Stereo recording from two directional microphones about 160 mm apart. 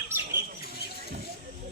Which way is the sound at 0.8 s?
85° left.